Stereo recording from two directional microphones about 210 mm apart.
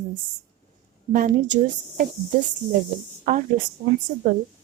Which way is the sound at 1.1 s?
40° right (ahead or behind).